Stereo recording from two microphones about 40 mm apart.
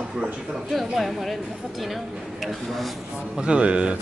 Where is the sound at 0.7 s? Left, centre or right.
Centre.